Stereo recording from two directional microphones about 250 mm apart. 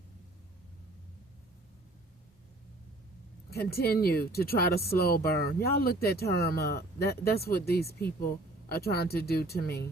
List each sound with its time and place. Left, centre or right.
3.5 s speech: left